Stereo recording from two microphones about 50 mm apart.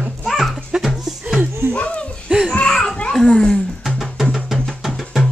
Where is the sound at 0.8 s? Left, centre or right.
Centre.